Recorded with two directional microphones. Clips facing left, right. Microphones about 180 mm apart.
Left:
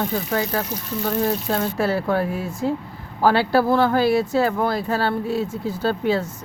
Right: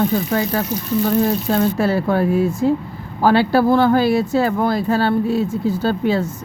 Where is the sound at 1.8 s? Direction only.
25° right (ahead or behind).